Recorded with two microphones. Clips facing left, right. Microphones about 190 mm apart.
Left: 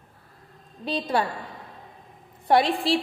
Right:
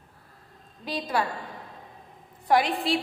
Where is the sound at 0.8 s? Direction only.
30° left (ahead or behind).